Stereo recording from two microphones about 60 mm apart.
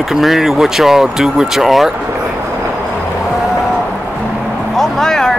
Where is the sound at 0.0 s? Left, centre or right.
Centre.